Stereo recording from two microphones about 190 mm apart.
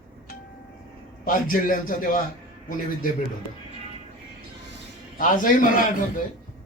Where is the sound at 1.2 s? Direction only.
45° left (ahead or behind).